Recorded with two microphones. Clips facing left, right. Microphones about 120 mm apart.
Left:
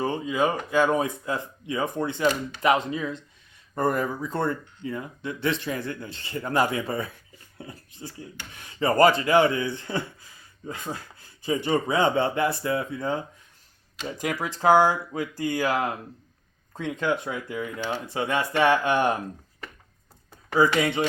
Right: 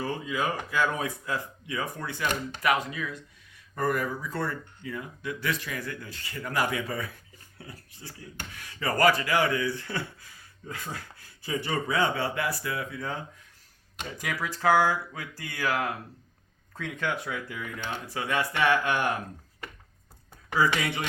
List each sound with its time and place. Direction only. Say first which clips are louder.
0.0 s speech: left 5 dB; 20° left (ahead or behind)
8.2 s speech: even; 25° left (ahead or behind)
14.2 s speech: left 4 dB; 25° left (ahead or behind)
20.6 s speech: left 5 dB; 25° left (ahead or behind)